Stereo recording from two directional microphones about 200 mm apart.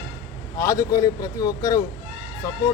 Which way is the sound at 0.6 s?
15° left (ahead or behind).